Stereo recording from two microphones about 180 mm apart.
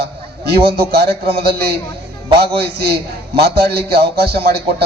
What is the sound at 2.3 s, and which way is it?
A man's voice, 60° right (ahead or behind).